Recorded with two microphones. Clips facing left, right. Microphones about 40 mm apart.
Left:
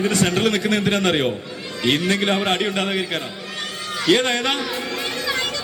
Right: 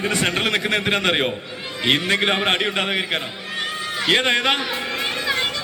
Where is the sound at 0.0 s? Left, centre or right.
Right.